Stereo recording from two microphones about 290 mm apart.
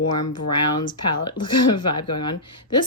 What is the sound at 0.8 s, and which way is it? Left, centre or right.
Speech, centre.